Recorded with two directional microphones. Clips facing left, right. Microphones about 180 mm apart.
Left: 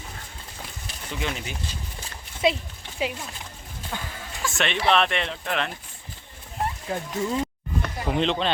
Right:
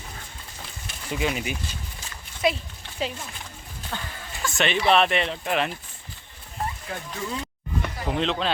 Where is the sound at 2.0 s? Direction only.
25° left (ahead or behind).